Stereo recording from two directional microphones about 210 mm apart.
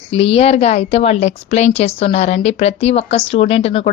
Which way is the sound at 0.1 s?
25° left (ahead or behind).